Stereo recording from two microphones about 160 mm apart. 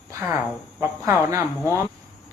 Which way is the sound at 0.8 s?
20° right (ahead or behind).